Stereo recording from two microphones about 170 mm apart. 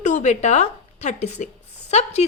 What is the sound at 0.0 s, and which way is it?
A woman's voice, 45° left (ahead or behind).